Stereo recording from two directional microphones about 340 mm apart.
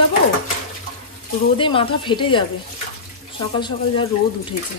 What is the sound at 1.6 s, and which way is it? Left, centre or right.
A woman's voice, centre.